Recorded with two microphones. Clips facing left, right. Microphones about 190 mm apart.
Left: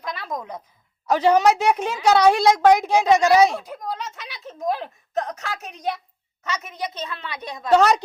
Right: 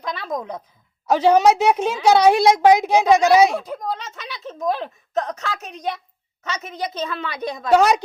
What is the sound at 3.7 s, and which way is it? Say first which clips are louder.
Speech: right 3 dB; 75° right (ahead or behind).